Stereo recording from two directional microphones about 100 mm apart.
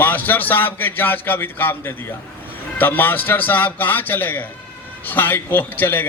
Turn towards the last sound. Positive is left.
turn(degrees=20)  # may be behind; listen again after turning